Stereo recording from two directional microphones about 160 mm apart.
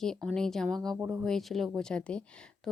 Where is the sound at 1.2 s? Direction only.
Centre (ahead or behind).